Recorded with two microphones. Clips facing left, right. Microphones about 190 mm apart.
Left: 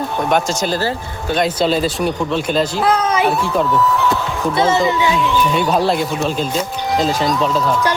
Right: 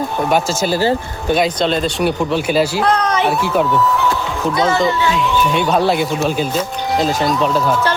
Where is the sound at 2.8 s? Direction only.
5° left (ahead or behind).